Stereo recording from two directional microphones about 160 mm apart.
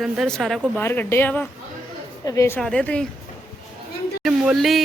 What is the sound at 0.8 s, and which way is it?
A woman's voice, 15° left (ahead or behind).